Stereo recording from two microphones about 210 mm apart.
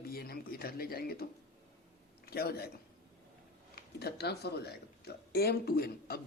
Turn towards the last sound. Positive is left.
turn(degrees=45)  # may be behind; listen again after turning